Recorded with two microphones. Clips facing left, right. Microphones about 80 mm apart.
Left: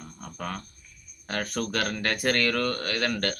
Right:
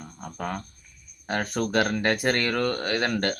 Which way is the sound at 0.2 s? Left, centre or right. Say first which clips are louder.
Right 3 dB; centre.